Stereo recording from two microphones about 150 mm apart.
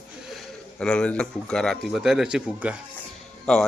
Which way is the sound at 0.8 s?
5° left (ahead or behind).